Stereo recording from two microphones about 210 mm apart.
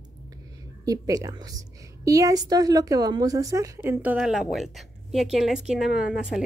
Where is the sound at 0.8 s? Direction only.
15° right (ahead or behind).